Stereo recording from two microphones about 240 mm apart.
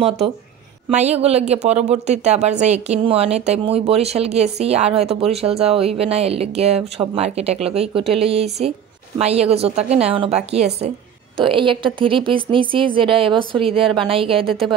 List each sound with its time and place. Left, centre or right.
0.8 s speech: right